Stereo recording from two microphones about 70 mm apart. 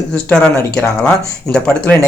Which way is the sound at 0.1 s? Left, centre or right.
Centre.